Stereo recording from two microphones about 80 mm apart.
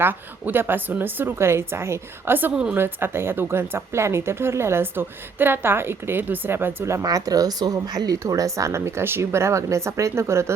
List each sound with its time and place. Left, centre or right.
0.0 s speech: right
6.8 s speech: right